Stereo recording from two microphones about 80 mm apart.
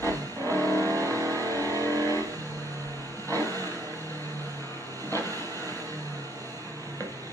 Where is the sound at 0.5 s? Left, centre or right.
Right.